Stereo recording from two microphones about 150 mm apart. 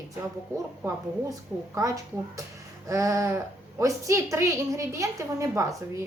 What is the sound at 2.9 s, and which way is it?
A woman's voice, 20° right (ahead or behind).